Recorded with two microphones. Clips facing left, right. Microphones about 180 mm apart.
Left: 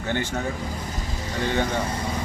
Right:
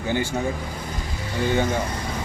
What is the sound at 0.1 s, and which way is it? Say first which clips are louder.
Speech: right 2 dB; 10° right (ahead or behind).